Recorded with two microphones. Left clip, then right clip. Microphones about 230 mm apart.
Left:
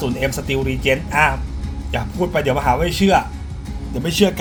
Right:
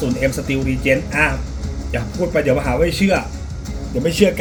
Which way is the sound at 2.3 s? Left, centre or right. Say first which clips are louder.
Even; left.